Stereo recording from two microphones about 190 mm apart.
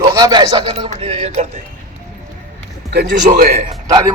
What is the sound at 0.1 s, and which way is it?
Speech, 20° right (ahead or behind).